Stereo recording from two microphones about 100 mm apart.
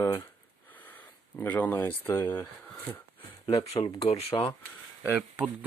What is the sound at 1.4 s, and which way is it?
Speech, 20° left (ahead or behind).